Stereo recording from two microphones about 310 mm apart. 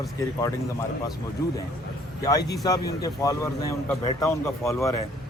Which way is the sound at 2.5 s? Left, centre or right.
Centre.